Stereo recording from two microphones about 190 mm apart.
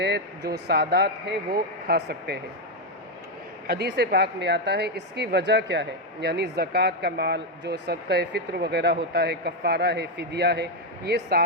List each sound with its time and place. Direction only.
0.0 s a woman's voice: 60° right (ahead or behind)
3.7 s a woman's voice: 60° right (ahead or behind)